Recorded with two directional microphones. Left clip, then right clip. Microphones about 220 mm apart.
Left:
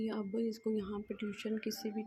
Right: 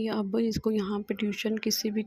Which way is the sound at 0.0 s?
35° right (ahead or behind).